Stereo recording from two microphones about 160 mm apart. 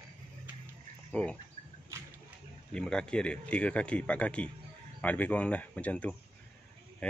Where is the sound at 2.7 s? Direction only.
5° left (ahead or behind).